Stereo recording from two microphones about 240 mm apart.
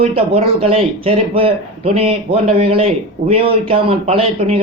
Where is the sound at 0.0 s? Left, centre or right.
Right.